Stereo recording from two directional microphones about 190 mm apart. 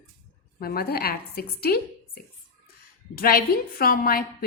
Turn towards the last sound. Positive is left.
turn(degrees=50)  # may be behind; listen again after turning